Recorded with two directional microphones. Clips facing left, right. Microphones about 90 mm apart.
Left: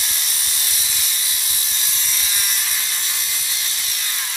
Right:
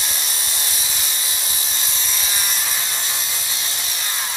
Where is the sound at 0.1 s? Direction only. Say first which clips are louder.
Right 2 dB; 30° right (ahead or behind).